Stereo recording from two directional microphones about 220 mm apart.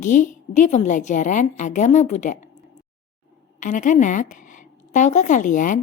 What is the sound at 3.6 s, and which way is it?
A woman's voice, 35° left (ahead or behind).